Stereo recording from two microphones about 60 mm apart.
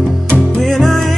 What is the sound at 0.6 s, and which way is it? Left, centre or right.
Music, centre.